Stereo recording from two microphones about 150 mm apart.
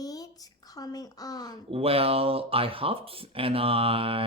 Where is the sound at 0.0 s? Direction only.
25° left (ahead or behind).